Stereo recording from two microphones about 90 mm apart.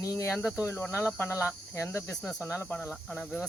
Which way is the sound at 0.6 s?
25° left (ahead or behind).